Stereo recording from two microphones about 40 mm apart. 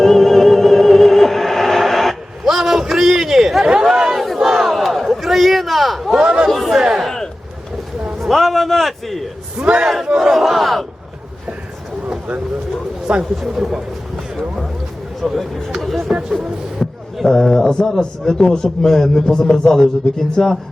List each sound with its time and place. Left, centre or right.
0.0 s music: centre
4.4 s battle cry: centre
6.1 s chatter: centre
6.5 s chatter: centre
6.7 s battle cry: centre
8.2 s a sound: centre
9.6 s speech: right
10.3 s battle cry: centre
13.1 s speech: right
13.4 s a man's voice: centre
15.2 s speech: centre
15.8 s a sound: centre
17.4 s a man's voice: centre